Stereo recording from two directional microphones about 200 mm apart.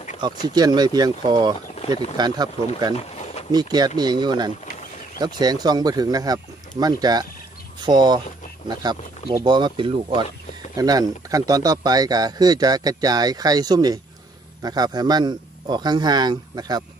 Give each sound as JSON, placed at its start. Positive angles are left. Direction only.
{"t": 0.2, "sound": "speech", "side_deg": -20}
{"t": 3.0, "sound": "a sound", "side_deg": 30}
{"t": 3.5, "sound": "speech", "side_deg": -20}
{"t": 9.4, "sound": "speech", "side_deg": -25}